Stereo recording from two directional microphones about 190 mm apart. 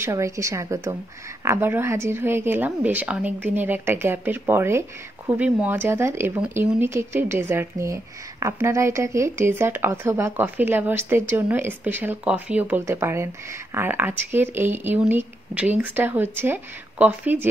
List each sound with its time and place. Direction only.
0.0 s a woman's voice: 15° right (ahead or behind)